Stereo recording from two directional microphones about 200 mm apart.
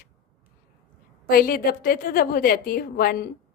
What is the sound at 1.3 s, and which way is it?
Speech, 45° left (ahead or behind).